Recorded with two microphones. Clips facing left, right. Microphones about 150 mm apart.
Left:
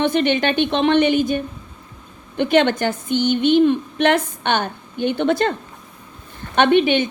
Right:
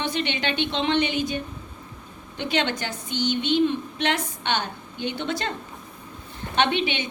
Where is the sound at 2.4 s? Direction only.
50° left (ahead or behind).